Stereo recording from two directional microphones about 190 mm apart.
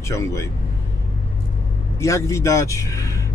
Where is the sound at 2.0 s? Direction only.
15° left (ahead or behind).